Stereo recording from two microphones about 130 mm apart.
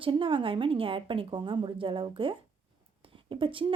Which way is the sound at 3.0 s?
40° right (ahead or behind).